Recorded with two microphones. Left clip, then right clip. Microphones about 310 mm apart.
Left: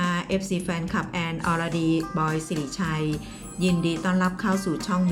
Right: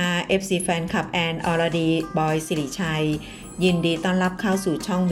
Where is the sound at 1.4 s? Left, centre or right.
Centre.